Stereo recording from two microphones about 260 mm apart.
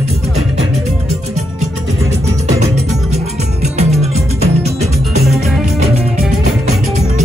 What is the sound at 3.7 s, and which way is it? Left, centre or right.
Music, right.